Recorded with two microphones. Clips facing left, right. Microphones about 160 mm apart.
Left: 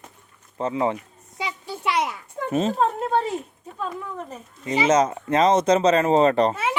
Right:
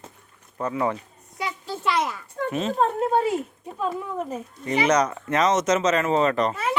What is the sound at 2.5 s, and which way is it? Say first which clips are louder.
Speech: left 5 dB; 35° left (ahead or behind).